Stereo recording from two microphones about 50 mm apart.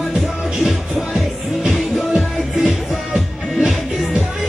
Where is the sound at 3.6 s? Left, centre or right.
Centre.